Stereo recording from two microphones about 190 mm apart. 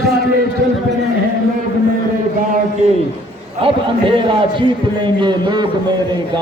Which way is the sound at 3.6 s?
25° right (ahead or behind).